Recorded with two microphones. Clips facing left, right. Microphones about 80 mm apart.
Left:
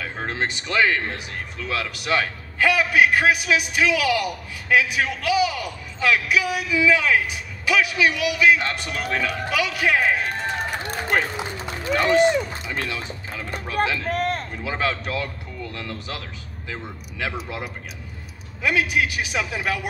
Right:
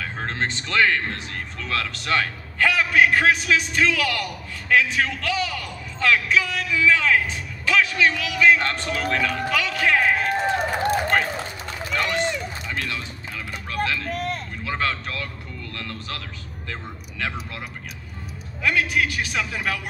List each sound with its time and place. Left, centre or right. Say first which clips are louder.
0.0 s speech: even; centre
14.1 s vehicle: left 4 dB; left
14.6 s speech: right 1 dB; centre